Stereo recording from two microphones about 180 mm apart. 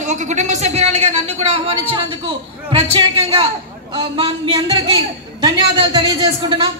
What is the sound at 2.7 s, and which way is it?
A man's voice, 25° right (ahead or behind).